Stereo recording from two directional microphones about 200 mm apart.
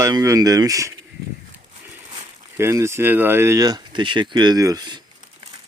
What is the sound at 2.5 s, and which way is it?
Speech, 15° right (ahead or behind).